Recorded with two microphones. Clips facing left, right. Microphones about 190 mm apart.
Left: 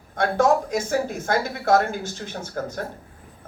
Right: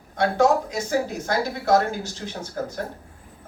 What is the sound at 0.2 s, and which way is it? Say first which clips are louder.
Speech: even; 50° left (ahead or behind).